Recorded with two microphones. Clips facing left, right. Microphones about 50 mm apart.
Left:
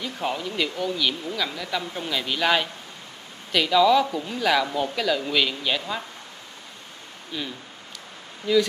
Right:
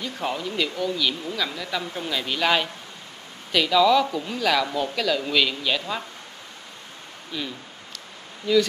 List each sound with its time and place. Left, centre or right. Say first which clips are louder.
0.0 s speech: even; centre
7.3 s speech: right 1 dB; centre